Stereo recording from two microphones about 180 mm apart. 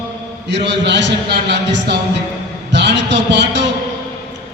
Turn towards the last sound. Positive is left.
turn(degrees=-75)  # may be behind; listen again after turning